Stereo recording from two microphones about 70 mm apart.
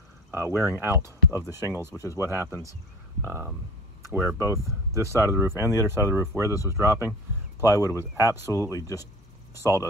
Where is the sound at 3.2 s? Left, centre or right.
Right.